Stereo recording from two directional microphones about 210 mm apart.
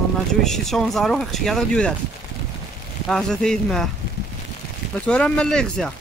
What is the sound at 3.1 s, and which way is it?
Speech, 5° left (ahead or behind).